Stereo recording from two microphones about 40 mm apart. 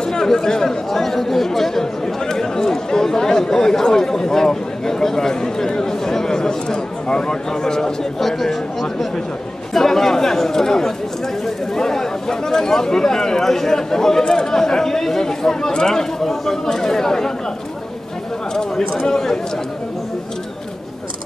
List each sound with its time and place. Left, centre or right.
0.0 s chatter: centre
9.8 s speech: centre
18.5 s speech: centre